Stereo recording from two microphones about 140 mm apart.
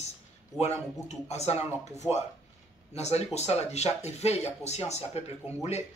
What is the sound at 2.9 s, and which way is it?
Speech, 50° left (ahead or behind).